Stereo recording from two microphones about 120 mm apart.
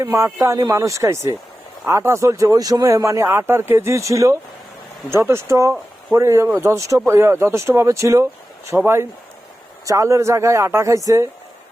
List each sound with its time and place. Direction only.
0.0 s speech: 25° right (ahead or behind)